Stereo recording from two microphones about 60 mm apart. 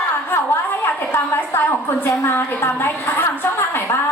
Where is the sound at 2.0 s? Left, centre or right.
Left.